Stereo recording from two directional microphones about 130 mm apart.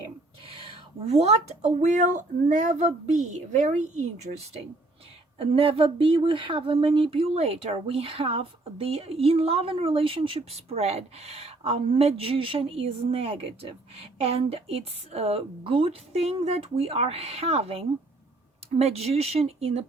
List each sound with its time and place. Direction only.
0.4 s speech: 45° right (ahead or behind); by 4.4 s 65° right (ahead or behind)
5.4 s speech: 45° right (ahead or behind)